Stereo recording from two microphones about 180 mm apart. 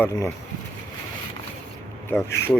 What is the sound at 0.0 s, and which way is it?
Speech, 15° left (ahead or behind).